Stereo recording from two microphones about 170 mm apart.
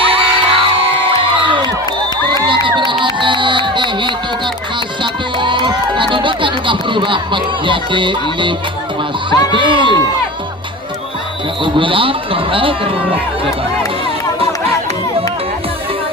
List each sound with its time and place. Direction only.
0.0 s music: 30° right (ahead or behind)
2.2 s crowd: 25° right (ahead or behind)
5.0 s music: 30° right (ahead or behind)
9.3 s speech: 20° left (ahead or behind)
9.6 s speech: 30° right (ahead or behind)
11.6 s speech: 30° right (ahead or behind)